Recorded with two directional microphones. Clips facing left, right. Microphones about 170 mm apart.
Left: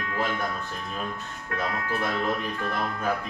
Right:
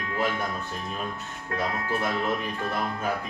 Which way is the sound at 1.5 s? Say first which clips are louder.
Right 1 dB; 25° right (ahead or behind).